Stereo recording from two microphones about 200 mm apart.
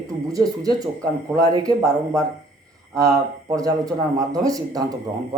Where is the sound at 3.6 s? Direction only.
15° right (ahead or behind).